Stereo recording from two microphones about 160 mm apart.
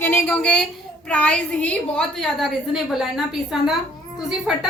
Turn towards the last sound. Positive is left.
turn(degrees=-5)  # may be behind; listen again after turning